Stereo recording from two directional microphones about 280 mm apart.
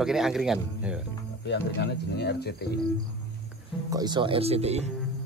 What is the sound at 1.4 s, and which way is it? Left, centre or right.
Speech, left.